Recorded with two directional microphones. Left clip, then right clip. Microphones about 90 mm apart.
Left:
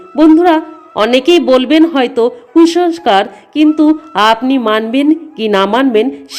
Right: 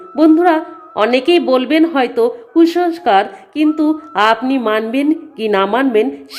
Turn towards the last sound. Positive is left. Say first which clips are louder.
# left 3 dB
turn(degrees=30)  # may be behind; listen again after turning